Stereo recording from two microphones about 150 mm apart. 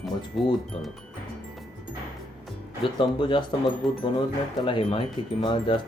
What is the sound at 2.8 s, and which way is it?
Speech, 35° left (ahead or behind).